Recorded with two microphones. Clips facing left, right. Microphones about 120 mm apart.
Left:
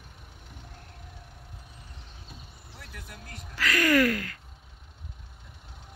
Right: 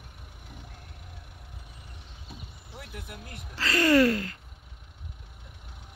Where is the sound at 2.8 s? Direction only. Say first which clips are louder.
Right 4 dB; 15° right (ahead or behind).